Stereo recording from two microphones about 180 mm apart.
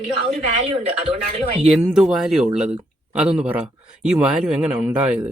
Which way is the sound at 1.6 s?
5° right (ahead or behind).